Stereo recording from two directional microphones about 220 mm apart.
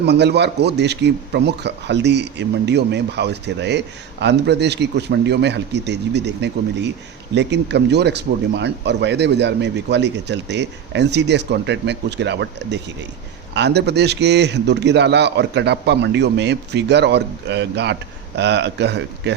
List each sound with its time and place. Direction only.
0.0 s a man's voice: 50° right (ahead or behind)